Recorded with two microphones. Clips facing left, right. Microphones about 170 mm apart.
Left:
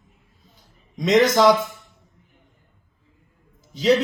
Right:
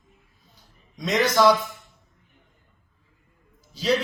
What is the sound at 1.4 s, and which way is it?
Speech, 20° left (ahead or behind).